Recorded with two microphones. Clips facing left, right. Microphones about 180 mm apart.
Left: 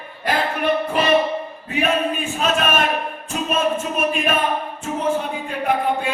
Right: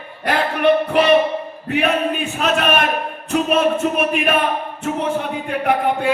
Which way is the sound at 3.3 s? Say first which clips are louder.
Right 5 dB; 65° right (ahead or behind).